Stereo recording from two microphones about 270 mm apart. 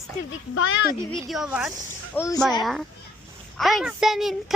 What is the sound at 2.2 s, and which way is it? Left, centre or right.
Speech, centre.